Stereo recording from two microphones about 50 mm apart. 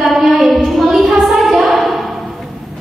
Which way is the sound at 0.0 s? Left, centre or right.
Centre.